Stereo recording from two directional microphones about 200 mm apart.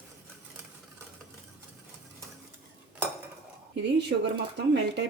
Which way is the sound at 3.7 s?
60° right (ahead or behind).